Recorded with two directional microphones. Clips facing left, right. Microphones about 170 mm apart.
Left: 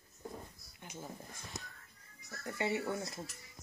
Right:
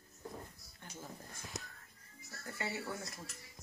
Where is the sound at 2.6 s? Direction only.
25° left (ahead or behind).